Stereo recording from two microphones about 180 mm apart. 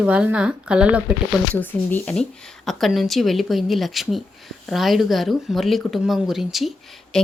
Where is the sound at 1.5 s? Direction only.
10° left (ahead or behind).